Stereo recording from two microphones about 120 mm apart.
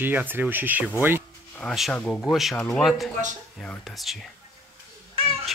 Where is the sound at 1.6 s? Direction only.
10° left (ahead or behind).